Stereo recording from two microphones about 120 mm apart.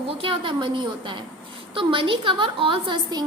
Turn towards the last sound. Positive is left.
turn(degrees=-40)  # may be behind; listen again after turning